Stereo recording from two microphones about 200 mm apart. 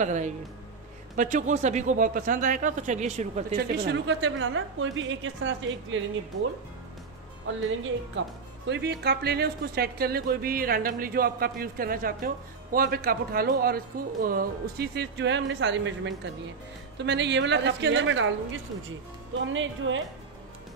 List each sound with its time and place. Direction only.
0.0 s a man's voice: 35° right (ahead or behind)
3.5 s a woman's voice: 55° right (ahead or behind)
8.6 s a woman's voice: 55° right (ahead or behind); by 20.0 s 70° right (ahead or behind)